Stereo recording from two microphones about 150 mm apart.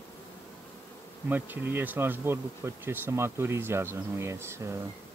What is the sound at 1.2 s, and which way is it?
Insect, 10° right (ahead or behind).